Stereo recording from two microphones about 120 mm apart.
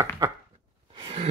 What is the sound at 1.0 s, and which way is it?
Sigh, 50° right (ahead or behind).